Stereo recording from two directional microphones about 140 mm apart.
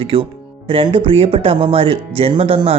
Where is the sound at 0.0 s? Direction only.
40° right (ahead or behind).